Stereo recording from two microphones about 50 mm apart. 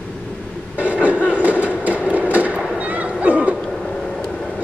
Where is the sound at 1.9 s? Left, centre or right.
Right.